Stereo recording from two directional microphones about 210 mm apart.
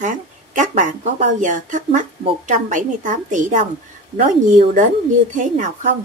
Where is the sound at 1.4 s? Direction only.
35° right (ahead or behind).